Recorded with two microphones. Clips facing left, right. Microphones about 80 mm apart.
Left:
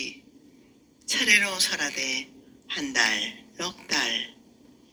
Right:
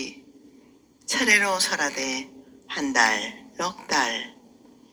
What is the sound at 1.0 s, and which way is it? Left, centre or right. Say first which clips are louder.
A woman's voice: right 4 dB; right.